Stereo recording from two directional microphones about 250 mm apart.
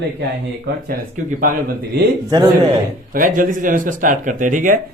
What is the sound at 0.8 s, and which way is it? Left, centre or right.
Speech, right.